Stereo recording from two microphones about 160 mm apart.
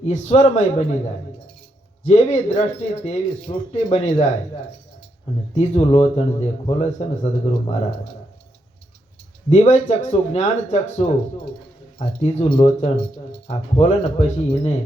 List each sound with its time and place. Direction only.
0.0 s a man's voice: 45° left (ahead or behind)
2.0 s speech: 45° left (ahead or behind)
5.5 s a man's voice: 40° left (ahead or behind)
9.5 s a man's voice: 40° left (ahead or behind)